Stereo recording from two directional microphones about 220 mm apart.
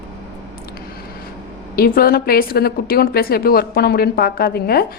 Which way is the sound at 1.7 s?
40° left (ahead or behind).